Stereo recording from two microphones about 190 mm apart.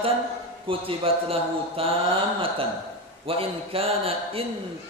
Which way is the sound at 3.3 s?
30° right (ahead or behind).